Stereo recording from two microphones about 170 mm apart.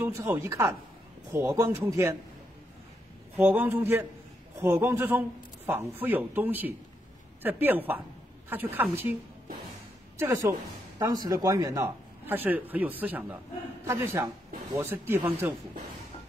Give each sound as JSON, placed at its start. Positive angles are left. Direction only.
{"t": 0.0, "sound": "speech", "side_deg": -10}
{"t": 3.3, "sound": "speech", "side_deg": -10}
{"t": 10.1, "sound": "a woman's voice", "side_deg": -15}